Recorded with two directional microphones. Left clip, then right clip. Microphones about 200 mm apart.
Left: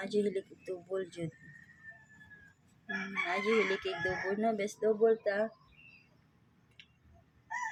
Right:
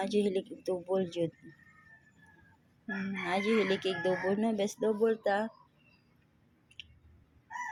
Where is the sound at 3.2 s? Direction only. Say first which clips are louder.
Right 2 dB; 25° right (ahead or behind).